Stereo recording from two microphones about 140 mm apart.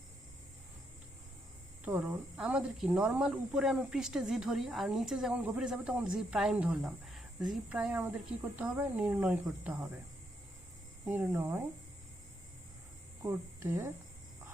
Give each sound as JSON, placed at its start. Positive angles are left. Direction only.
{"t": 1.8, "sound": "speech", "side_deg": -10}
{"t": 11.1, "sound": "speech", "side_deg": -15}
{"t": 13.2, "sound": "speech", "side_deg": -20}